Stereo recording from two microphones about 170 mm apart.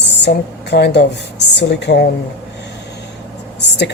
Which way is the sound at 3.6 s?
90° left.